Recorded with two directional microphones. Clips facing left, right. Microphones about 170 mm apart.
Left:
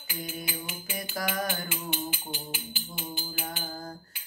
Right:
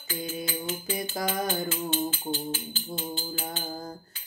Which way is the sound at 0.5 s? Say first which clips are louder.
Right 6 dB; 15° left (ahead or behind).